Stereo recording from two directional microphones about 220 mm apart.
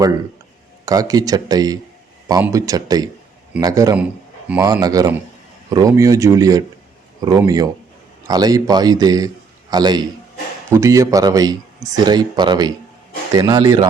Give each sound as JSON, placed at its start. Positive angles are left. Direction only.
{"t": 0.9, "sound": "a man's voice", "side_deg": -15}